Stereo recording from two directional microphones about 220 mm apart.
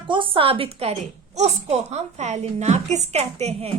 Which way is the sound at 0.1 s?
25° right (ahead or behind).